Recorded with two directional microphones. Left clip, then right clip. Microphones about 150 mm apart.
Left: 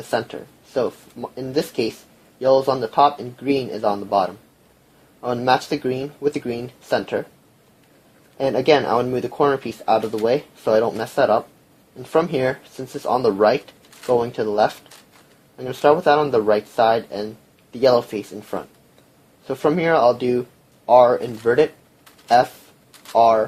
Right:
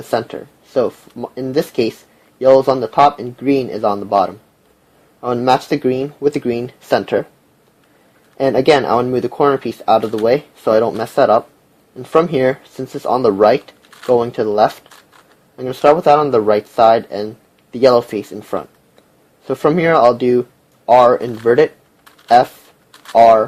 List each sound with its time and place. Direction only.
0.1 s speech: 45° right (ahead or behind)
8.4 s speech: 50° right (ahead or behind)
23.1 s speech: 45° right (ahead or behind)